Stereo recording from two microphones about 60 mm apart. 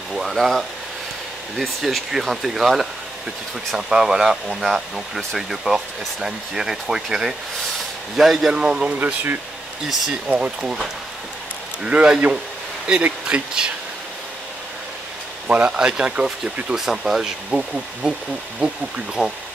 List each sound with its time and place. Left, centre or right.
0.1 s speech: centre
8.9 s speech: right
9.8 s speech: centre
10.3 s speech: centre
11.8 s speech: centre
15.4 s speech: right
19.2 s speech: centre